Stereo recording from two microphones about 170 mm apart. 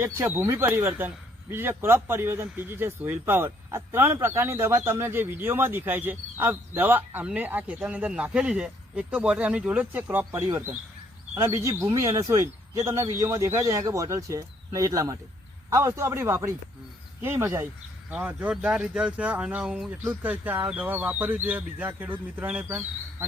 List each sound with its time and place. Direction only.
0.0 s speech: 15° right (ahead or behind)